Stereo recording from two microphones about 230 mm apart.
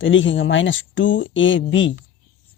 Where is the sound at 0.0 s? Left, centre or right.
Left.